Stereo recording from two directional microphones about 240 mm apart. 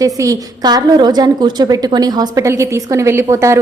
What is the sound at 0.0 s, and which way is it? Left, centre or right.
A woman's voice, centre.